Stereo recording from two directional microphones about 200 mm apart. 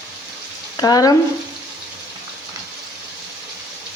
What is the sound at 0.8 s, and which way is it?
Speech, 20° left (ahead or behind).